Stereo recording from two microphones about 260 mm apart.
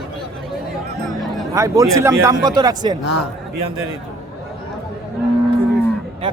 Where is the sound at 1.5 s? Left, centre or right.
Centre.